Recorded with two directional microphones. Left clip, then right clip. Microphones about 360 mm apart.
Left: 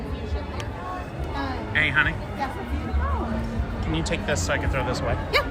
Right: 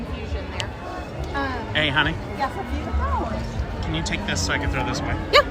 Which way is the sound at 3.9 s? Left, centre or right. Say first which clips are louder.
Left 1 dB; centre.